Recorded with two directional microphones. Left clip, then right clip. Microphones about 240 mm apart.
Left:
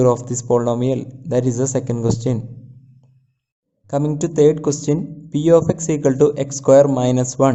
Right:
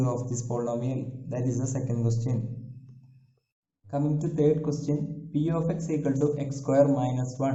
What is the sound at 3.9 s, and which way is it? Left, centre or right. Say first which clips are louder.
Speech: left 9 dB; left.